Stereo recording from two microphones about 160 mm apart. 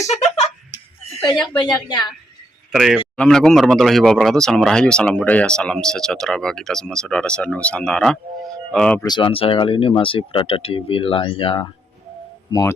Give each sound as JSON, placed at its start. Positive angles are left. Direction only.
{"t": 1.3, "sound": "a woman's voice", "side_deg": 30}
{"t": 2.7, "sound": "speech", "side_deg": -5}
{"t": 9.0, "sound": "speech", "side_deg": 30}